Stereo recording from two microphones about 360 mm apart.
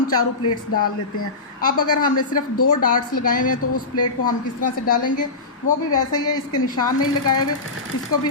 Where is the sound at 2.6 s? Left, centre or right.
Left.